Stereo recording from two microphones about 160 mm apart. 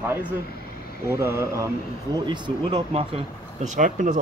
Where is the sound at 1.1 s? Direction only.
15° right (ahead or behind).